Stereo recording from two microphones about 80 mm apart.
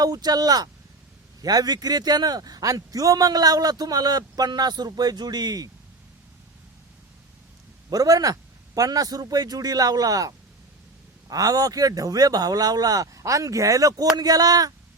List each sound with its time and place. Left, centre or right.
0.0 s a man's voice: right
7.9 s speech: right